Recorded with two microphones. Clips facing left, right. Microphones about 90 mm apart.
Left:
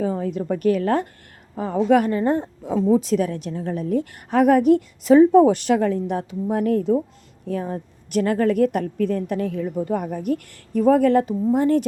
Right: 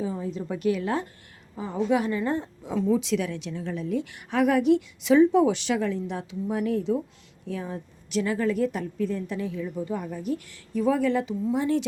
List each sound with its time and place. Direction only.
0.0 s a woman's voice: 60° left (ahead or behind)
0.4 s a woman's voice: 45° left (ahead or behind)
2.7 s a woman's voice: 40° left (ahead or behind)